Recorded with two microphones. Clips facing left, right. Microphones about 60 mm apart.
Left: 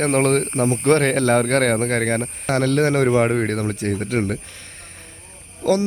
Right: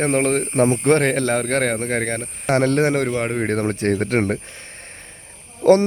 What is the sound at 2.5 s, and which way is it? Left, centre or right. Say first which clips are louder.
Speech: right 1 dB; right.